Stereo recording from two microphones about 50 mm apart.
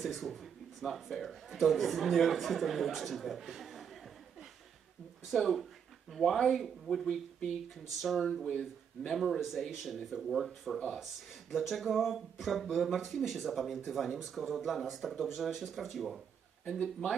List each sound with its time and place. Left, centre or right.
0.0 s a man's voice: centre
5.3 s a man's voice: centre
8.5 s speech: centre
9.2 s a man's voice: centre